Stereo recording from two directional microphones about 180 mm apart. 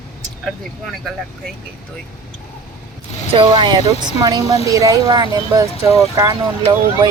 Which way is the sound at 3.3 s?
30° right (ahead or behind).